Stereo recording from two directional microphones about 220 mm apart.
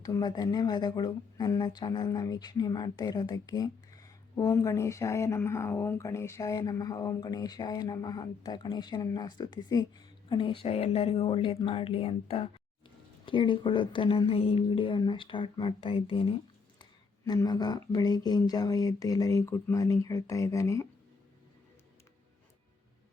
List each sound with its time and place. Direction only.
0.0 s speech: 20° left (ahead or behind)